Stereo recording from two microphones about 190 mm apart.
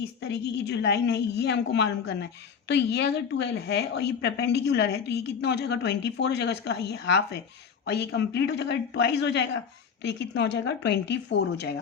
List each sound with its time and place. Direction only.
0.2 s a woman's voice: 65° left (ahead or behind)